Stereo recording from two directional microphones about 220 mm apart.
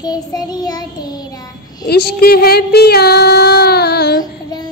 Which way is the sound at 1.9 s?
45° left (ahead or behind).